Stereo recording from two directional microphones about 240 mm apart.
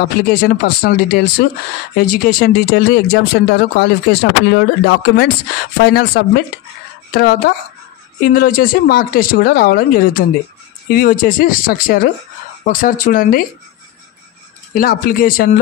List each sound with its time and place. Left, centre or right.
0.0 s a woman's voice: left
14.7 s a woman's voice: left